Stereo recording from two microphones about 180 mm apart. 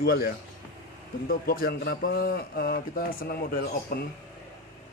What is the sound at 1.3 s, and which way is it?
A man's voice, 55° left (ahead or behind).